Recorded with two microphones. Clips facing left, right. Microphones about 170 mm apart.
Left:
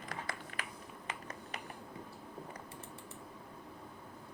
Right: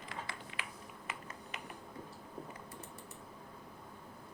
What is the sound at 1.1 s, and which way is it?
Finger snapping, 35° left (ahead or behind).